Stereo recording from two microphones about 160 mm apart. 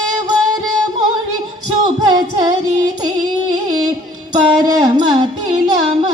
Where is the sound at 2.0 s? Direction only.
30° right (ahead or behind).